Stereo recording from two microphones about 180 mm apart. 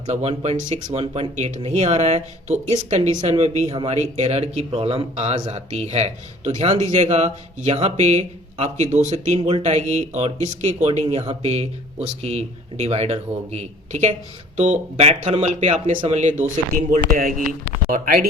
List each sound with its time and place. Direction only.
0.1 s speech: 35° right (ahead or behind); by 18.3 s 50° right (ahead or behind)